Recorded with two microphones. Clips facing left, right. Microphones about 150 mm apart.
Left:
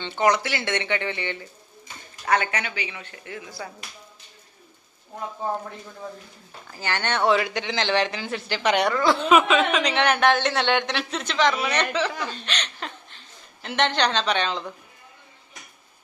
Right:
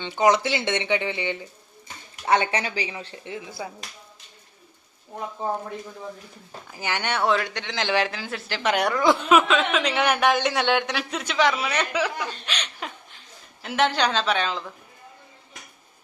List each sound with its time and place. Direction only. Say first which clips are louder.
0.0 s a woman's voice: right 2 dB; 15° right (ahead or behind)
2.2 s speech: right 2 dB; 30° right (ahead or behind)
3.6 s a woman's voice: right 2 dB; 15° right (ahead or behind)
6.7 s a woman's voice: left 1 dB; 15° right (ahead or behind)
7.3 s a woman's voice: left 5 dB; 5° left (ahead or behind); by 9.1 s 10° right (ahead or behind)
9.3 s a woman's voice: left 1 dB; centre (ahead or behind)